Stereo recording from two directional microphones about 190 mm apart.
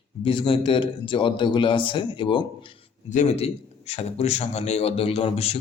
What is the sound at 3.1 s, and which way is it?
A man's voice, 35° left (ahead or behind).